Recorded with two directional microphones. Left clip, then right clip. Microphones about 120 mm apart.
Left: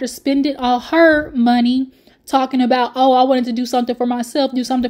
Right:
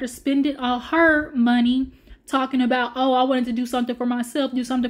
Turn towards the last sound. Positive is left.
turn(degrees=40)  # may be behind; listen again after turning